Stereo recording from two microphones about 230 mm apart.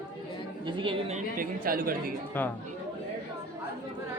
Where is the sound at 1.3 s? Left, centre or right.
Right.